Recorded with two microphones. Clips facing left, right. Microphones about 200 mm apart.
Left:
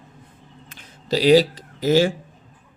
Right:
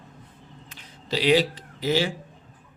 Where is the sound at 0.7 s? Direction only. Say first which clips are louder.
Left 6 dB; 40° left (ahead or behind).